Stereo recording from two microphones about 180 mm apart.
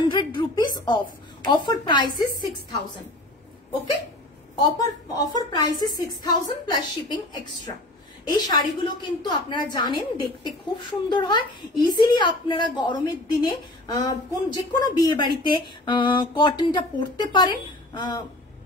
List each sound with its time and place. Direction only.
0.0 s a sound: 25° left (ahead or behind)
1.5 s a woman's voice: 25° left (ahead or behind)
4.6 s a woman's voice: 20° left (ahead or behind)